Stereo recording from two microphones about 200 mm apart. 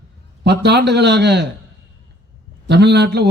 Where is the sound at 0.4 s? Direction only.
55° right (ahead or behind).